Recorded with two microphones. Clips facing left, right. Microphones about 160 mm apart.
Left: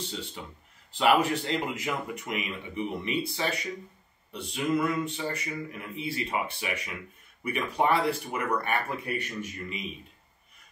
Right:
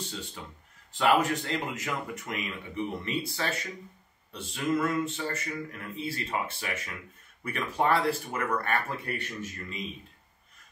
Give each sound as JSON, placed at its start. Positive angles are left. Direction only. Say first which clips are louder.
{"t": 0.9, "sound": "a man's voice", "louder": "left 1 dB", "side_deg": 20}